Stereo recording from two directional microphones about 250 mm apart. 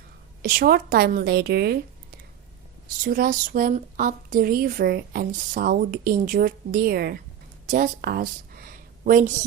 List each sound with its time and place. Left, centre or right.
0.4 s a woman's voice: right
3.0 s a woman's voice: right